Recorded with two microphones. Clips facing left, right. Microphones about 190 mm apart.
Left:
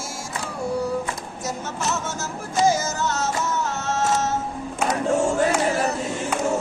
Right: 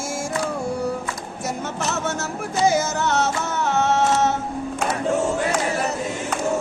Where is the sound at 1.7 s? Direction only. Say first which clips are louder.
Right 2 dB; 60° right (ahead or behind).